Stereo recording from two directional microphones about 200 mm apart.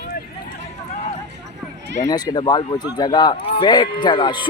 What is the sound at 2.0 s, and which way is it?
Speech, 20° left (ahead or behind).